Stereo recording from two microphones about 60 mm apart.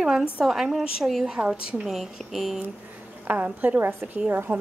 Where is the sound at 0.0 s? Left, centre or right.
Centre.